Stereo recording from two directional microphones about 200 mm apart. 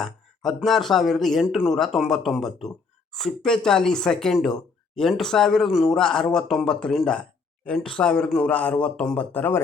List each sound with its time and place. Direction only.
0.0 s speech: centre (ahead or behind)